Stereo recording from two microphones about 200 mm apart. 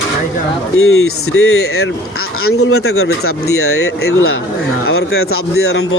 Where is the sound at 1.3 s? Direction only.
90° left.